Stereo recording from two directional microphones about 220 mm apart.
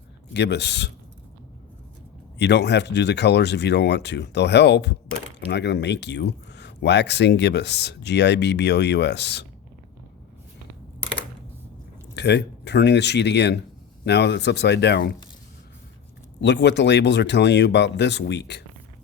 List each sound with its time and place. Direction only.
0.3 s speech: 50° left (ahead or behind)
2.4 s speech: 50° left (ahead or behind)
12.1 s speech: 50° left (ahead or behind)
16.4 s speech: 50° left (ahead or behind)